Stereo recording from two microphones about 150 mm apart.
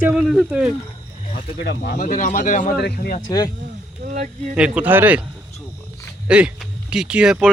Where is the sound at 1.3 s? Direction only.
90° left.